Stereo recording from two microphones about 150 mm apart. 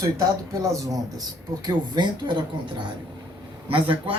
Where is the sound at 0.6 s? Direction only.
20° right (ahead or behind).